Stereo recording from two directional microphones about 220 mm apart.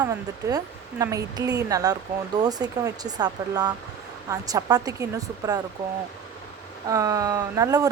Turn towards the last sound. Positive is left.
turn(degrees=-15)  # may be behind; listen again after turning